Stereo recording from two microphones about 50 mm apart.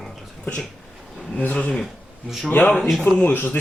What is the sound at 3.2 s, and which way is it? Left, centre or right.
Speech, left.